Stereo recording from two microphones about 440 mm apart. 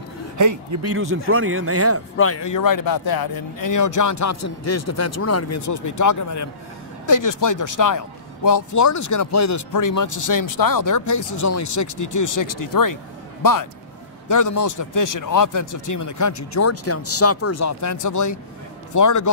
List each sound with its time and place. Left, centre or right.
0.4 s speech: right
2.1 s a man's voice: left